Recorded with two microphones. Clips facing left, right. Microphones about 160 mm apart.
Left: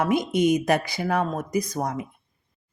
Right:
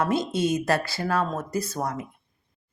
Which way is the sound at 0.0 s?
15° left (ahead or behind).